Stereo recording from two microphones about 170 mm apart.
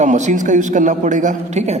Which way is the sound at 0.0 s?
45° right (ahead or behind).